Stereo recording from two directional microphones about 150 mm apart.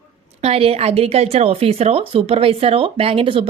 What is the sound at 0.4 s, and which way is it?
A woman's voice, 40° right (ahead or behind).